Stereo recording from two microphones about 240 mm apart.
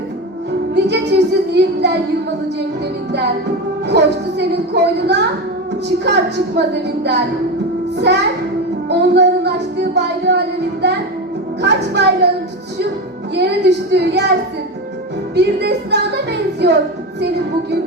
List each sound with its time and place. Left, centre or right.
0.8 s child singing: right
3.8 s a woman's voice: right
7.0 s a woman's voice: right
8.9 s music: right
11.6 s a woman's voice: right
13.3 s a woman's voice: right
15.4 s a woman's voice: right